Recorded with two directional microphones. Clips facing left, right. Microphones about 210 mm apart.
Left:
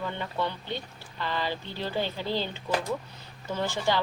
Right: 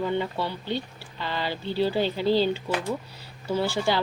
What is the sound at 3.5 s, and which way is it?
Speech, 10° right (ahead or behind).